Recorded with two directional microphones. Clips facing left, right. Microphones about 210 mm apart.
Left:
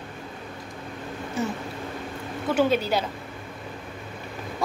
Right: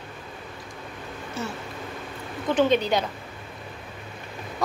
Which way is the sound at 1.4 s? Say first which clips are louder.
Left 4 dB; 15° left (ahead or behind).